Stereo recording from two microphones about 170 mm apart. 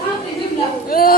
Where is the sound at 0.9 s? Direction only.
60° left (ahead or behind).